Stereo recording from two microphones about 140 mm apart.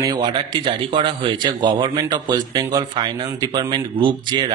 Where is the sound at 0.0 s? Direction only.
30° right (ahead or behind).